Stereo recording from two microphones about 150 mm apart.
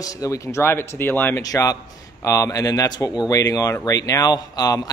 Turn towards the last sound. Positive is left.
turn(degrees=25)  # may be behind; listen again after turning